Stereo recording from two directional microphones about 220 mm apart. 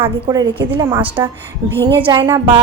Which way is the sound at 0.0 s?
15° right (ahead or behind).